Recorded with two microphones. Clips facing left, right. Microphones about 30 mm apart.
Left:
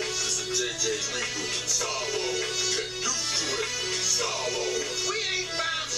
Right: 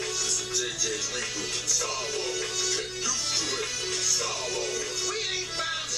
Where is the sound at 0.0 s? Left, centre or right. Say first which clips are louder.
Left 1 dB; centre.